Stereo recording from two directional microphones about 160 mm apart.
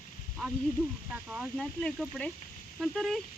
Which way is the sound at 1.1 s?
5° right (ahead or behind).